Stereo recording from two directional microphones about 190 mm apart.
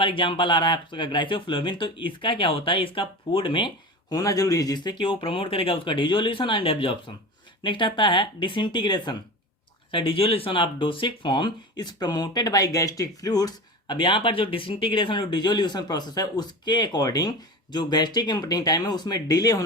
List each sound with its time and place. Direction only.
0.0 s speech: 25° left (ahead or behind)